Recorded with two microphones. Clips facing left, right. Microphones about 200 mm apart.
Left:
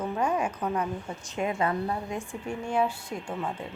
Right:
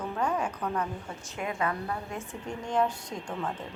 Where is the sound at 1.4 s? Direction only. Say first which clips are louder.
Left 4 dB; 25° left (ahead or behind).